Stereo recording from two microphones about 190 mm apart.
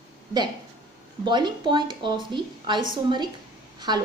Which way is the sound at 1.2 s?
25° right (ahead or behind).